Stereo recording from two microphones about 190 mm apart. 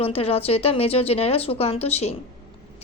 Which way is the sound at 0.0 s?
30° left (ahead or behind).